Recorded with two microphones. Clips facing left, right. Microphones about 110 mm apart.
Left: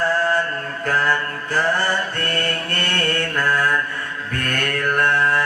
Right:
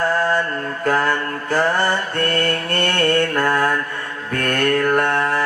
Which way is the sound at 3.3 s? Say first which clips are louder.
Right 2 dB; 40° right (ahead or behind).